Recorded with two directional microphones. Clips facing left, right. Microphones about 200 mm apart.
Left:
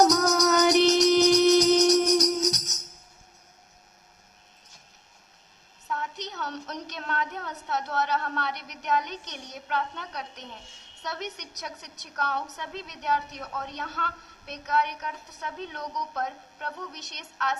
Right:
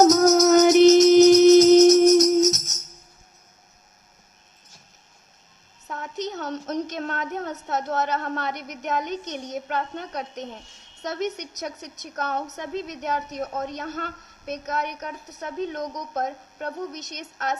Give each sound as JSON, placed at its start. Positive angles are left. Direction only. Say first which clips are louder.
{"t": 0.0, "sound": "music", "louder": "right 6 dB", "side_deg": -45}
{"t": 5.9, "sound": "a sound", "louder": "right 4 dB", "side_deg": -45}
{"t": 11.0, "sound": "a woman's voice", "louder": "right 8 dB", "side_deg": -45}